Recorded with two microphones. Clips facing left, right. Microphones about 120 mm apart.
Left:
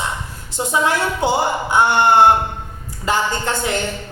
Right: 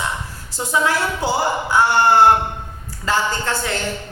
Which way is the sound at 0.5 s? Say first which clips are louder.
Left 1 dB; 20° left (ahead or behind).